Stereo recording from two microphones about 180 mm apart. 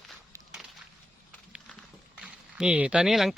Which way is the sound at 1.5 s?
5° right (ahead or behind).